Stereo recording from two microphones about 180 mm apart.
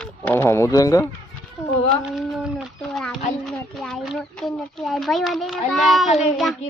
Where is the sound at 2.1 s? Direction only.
Centre (ahead or behind).